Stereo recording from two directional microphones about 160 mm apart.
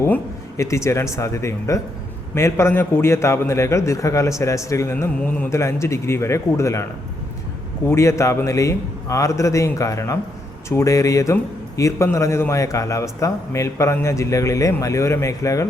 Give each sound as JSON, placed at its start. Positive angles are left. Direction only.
{"t": 0.0, "sound": "a man's voice", "side_deg": 15}
{"t": 7.9, "sound": "a man's voice", "side_deg": 15}